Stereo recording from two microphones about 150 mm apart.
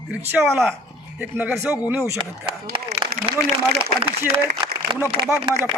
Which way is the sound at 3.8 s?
40° right (ahead or behind).